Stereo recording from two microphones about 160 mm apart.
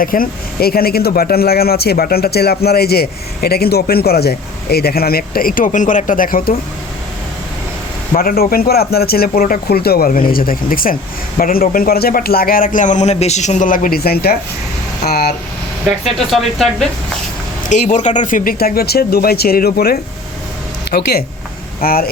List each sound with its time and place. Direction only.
0.0 s speech: 60° left (ahead or behind)
8.1 s a man's voice: 65° left (ahead or behind)
16.1 s speech: centre (ahead or behind)
17.7 s speech: 50° left (ahead or behind); by 22.1 s 70° left (ahead or behind)